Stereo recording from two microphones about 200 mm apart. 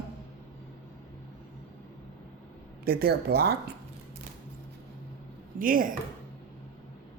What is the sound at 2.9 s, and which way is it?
Speech, 50° right (ahead or behind).